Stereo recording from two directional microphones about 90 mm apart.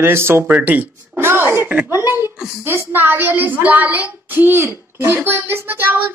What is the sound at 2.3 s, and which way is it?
Speech, 5° right (ahead or behind).